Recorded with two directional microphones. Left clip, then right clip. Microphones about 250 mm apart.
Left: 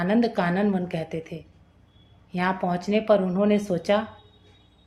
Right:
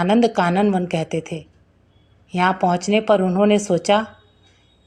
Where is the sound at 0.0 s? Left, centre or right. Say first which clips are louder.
Right 7 dB; right.